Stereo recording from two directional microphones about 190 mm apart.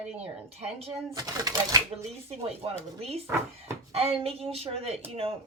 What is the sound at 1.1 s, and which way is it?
Speech, 20° right (ahead or behind).